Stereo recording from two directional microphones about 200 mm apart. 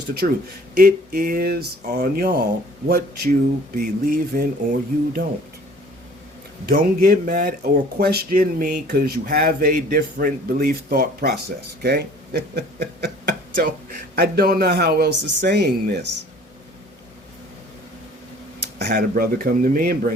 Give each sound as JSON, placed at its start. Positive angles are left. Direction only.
{"t": 0.2, "sound": "speech", "side_deg": -45}
{"t": 6.7, "sound": "speech", "side_deg": -50}
{"t": 14.2, "sound": "speech", "side_deg": -50}
{"t": 18.9, "sound": "speech", "side_deg": -50}